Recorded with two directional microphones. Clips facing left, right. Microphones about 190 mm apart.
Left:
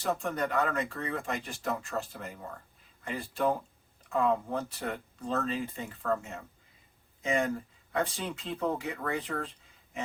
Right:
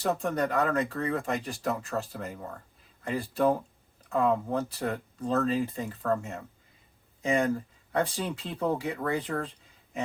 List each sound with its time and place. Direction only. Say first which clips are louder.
0.2 s speech: right 3 dB; 35° right (ahead or behind)